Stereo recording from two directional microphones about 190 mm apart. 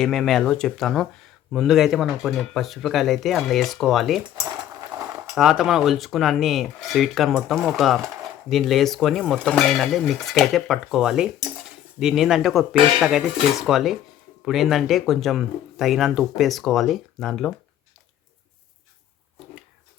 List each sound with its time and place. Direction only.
0.0 s speech: centre (ahead or behind)
5.3 s speech: centre (ahead or behind)